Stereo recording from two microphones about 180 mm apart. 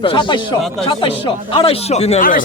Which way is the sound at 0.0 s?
25° left (ahead or behind).